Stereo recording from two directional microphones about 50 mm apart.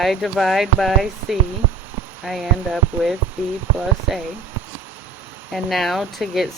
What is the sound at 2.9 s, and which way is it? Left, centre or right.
Speech, right.